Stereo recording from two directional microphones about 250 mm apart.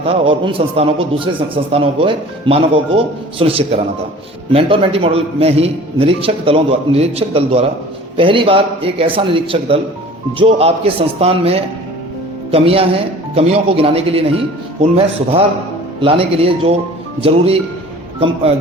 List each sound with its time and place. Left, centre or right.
0.0 s a man's voice: right